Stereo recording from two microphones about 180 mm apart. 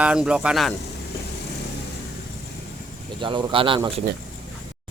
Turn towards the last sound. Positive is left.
turn(degrees=-30)  # may be behind; listen again after turning